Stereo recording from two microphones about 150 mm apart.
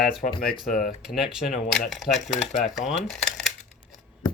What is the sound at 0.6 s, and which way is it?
Speech, centre (ahead or behind).